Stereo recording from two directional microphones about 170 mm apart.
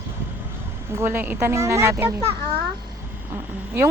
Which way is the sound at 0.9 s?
10° right (ahead or behind).